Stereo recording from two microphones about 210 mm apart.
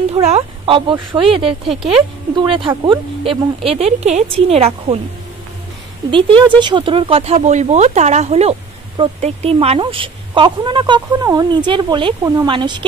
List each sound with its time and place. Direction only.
0.1 s speech: 30° right (ahead or behind)
2.3 s speech: 25° right (ahead or behind)
6.0 s speech: 25° right (ahead or behind)